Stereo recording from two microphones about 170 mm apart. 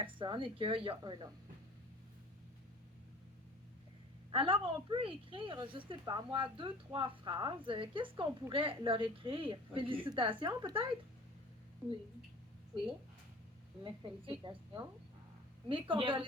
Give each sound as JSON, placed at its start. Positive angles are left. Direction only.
{"t": 0.0, "sound": "a woman's voice", "side_deg": -30}
{"t": 4.3, "sound": "a woman's voice", "side_deg": -30}
{"t": 12.7, "sound": "a woman's voice", "side_deg": -30}
{"t": 15.7, "sound": "a woman's voice", "side_deg": -30}